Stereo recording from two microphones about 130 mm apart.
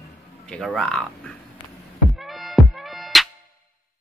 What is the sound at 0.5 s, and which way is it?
Speech, 5° left (ahead or behind).